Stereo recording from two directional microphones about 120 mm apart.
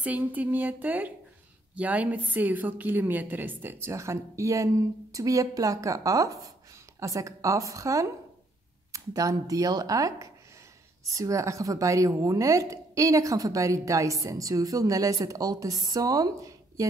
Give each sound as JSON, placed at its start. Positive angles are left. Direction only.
{"t": 0.0, "sound": "a woman's voice", "side_deg": -15}